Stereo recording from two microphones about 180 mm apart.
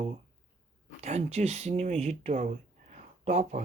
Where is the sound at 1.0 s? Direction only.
40° right (ahead or behind).